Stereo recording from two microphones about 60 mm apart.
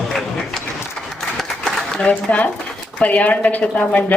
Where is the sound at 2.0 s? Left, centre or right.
Left.